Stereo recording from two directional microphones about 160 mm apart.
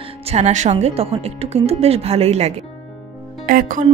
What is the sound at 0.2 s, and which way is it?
Speech, 40° right (ahead or behind).